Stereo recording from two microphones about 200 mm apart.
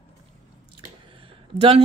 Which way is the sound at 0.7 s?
25° right (ahead or behind).